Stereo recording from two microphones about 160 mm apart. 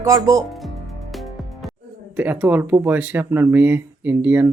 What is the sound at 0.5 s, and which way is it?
Music, centre (ahead or behind).